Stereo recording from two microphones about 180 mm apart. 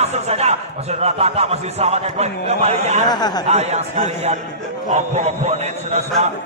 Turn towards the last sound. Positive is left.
turn(degrees=-35)  # may be behind; listen again after turning